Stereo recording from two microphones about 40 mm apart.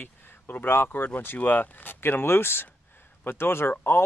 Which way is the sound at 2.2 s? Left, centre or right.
Left.